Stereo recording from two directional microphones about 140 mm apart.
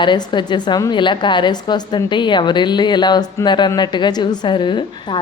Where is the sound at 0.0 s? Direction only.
35° left (ahead or behind).